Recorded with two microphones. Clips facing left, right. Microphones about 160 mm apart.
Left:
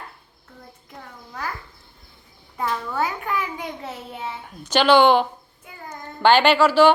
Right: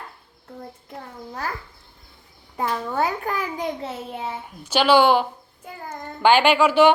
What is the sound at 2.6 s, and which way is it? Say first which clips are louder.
A child's voice: right 1 dB; 30° right (ahead or behind).